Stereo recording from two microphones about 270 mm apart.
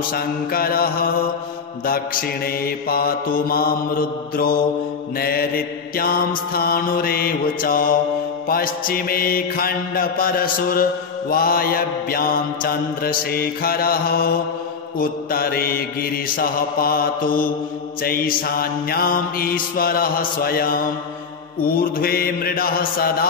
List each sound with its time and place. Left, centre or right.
0.1 s mantra: left